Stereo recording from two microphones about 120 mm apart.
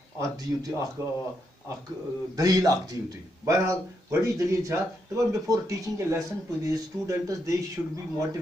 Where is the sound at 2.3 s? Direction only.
30° right (ahead or behind).